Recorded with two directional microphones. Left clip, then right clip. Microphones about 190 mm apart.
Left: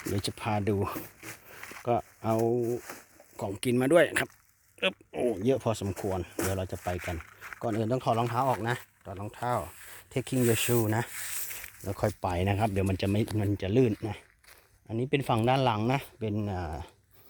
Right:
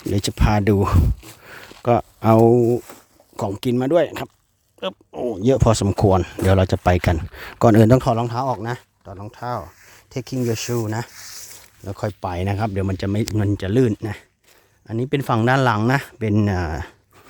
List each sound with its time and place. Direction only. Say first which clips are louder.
0.1 s speech: right 10 dB; 40° right (ahead or behind)
3.3 s speech: right 7 dB; 35° right (ahead or behind); by 5.4 s 10° right (ahead or behind)
5.4 s a man's voice: right 11 dB; 40° right (ahead or behind)
8.1 s speech: right 6 dB; 25° right (ahead or behind)
8.6 s speech: right 4 dB; 10° right (ahead or behind)
11.9 s speech: right 4 dB; 10° right (ahead or behind)
13.3 s speech: right 10 dB; 35° right (ahead or behind)
16.3 s speech: right 15 dB; 55° right (ahead or behind)